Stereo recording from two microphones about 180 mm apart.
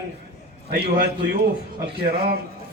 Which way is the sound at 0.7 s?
60° right (ahead or behind).